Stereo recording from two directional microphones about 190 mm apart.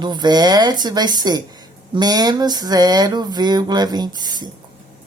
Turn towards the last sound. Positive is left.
turn(degrees=-20)  # may be behind; listen again after turning